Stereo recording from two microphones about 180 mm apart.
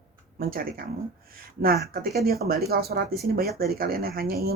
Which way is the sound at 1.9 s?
60° right (ahead or behind).